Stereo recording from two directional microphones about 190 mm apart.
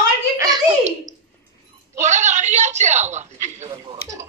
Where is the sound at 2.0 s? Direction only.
40° right (ahead or behind).